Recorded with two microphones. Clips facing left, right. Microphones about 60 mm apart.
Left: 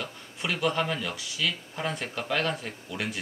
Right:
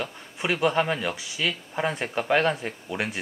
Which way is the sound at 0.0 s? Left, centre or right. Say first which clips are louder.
Right 4 dB; right.